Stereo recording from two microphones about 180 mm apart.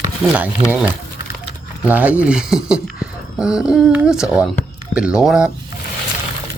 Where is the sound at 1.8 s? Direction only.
10° right (ahead or behind).